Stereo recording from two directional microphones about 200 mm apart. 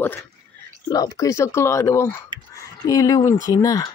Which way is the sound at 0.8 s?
15° left (ahead or behind).